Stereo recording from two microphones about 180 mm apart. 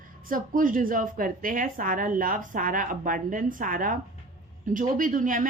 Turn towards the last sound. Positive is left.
turn(degrees=-50)  # may be behind; listen again after turning